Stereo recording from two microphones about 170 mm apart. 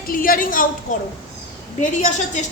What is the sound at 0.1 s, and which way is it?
A woman's voice, 55° left (ahead or behind).